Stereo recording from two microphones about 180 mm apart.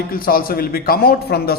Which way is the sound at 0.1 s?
55° left (ahead or behind).